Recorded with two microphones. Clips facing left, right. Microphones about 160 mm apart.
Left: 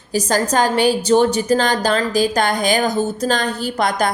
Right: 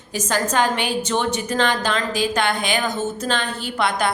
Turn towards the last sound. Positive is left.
turn(degrees=40)  # may be behind; listen again after turning